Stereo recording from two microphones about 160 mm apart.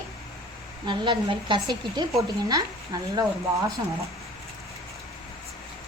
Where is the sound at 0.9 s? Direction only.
30° right (ahead or behind).